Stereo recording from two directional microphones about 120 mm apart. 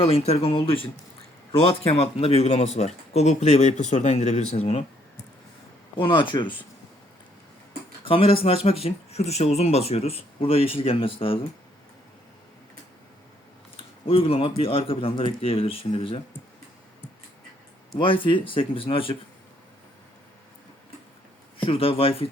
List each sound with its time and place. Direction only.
0.0 s speech: 55° left (ahead or behind)
2.0 s speech: 55° left (ahead or behind)
6.0 s speech: 45° left (ahead or behind)
8.0 s speech: 50° left (ahead or behind)
13.7 s speech: 55° left (ahead or behind)
17.9 s speech: 45° left (ahead or behind)
21.6 s speech: 50° left (ahead or behind)